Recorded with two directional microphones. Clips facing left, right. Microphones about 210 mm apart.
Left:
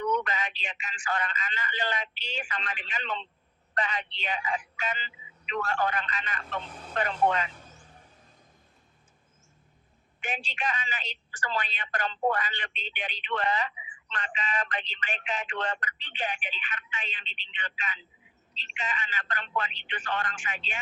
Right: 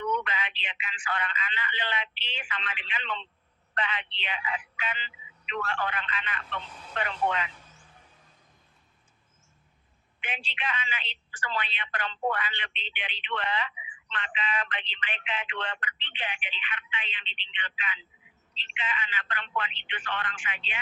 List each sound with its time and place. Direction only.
0.0 s speech: 40° left (ahead or behind)
10.2 s speech: 45° left (ahead or behind)